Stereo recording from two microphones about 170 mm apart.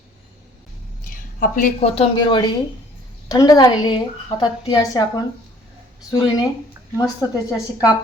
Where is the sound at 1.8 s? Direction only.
30° left (ahead or behind).